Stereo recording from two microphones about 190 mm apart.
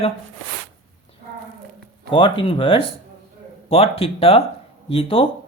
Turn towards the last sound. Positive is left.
turn(degrees=30)  # may be behind; listen again after turning